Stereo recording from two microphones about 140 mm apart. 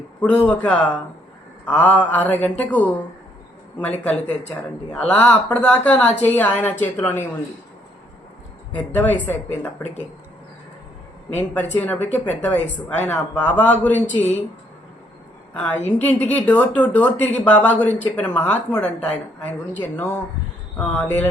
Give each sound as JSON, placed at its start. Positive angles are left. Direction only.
{"t": 0.2, "sound": "a woman's voice", "side_deg": 10}
{"t": 8.7, "sound": "a woman's voice", "side_deg": 10}
{"t": 11.3, "sound": "a woman's voice", "side_deg": 10}
{"t": 15.5, "sound": "a woman's voice", "side_deg": 10}